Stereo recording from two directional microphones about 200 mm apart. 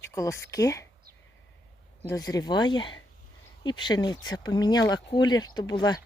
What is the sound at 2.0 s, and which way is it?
Speech, 15° left (ahead or behind).